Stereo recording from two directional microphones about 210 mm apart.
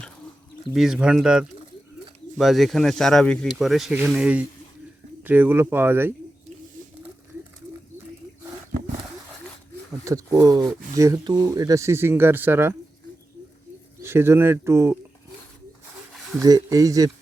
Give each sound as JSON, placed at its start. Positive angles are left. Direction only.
{"t": 0.7, "sound": "speech", "side_deg": 0}
{"t": 10.0, "sound": "speech", "side_deg": -15}
{"t": 14.0, "sound": "speech", "side_deg": -10}
{"t": 16.4, "sound": "speech", "side_deg": -15}